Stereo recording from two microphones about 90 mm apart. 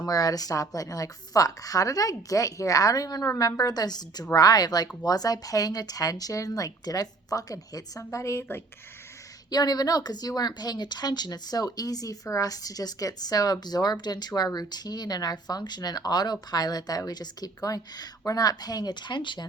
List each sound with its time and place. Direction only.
0.0 s a woman's voice: 40° left (ahead or behind); by 8.6 s 25° left (ahead or behind)
9.5 s speech: 50° left (ahead or behind)